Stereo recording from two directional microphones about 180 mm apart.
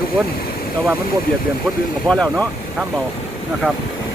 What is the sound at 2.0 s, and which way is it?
Speech, 5° left (ahead or behind).